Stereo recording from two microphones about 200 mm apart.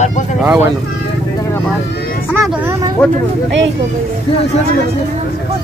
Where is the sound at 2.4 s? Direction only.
5° right (ahead or behind).